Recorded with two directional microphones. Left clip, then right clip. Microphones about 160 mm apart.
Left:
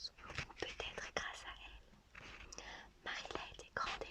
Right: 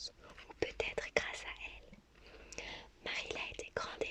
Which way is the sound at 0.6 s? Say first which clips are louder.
Right 11 dB; 25° right (ahead or behind).